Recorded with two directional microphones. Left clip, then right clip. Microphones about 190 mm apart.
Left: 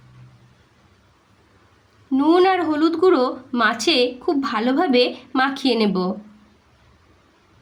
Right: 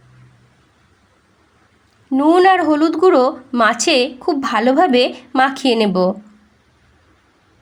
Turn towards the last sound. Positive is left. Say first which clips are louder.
# right 5 dB
turn(degrees=-35)  # may be behind; listen again after turning